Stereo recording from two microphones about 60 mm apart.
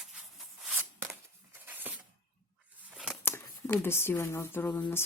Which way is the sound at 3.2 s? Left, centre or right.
Left.